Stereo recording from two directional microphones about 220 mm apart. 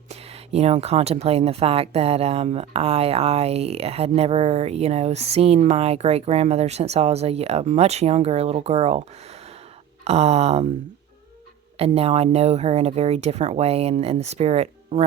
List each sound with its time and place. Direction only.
0.1 s speech: 30° right (ahead or behind)
11.8 s speech: 25° right (ahead or behind)